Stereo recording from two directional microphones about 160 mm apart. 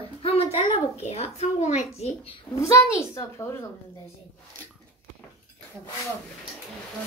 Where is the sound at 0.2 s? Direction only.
40° left (ahead or behind).